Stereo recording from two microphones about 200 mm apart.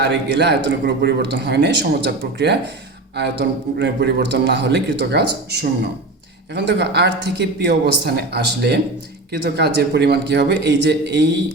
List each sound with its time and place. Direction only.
0.0 s a man's voice: 60° right (ahead or behind)
3.8 s a man's voice: 60° right (ahead or behind)